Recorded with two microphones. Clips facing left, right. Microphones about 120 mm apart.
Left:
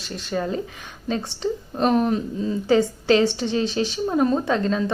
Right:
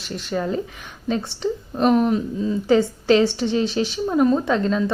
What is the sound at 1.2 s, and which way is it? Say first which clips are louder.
A woman's voice: right 1 dB; 20° left (ahead or behind).